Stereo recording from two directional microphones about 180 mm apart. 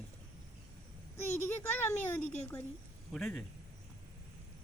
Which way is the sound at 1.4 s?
10° left (ahead or behind).